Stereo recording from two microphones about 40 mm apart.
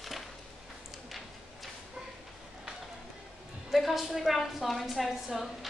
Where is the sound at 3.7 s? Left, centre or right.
Centre.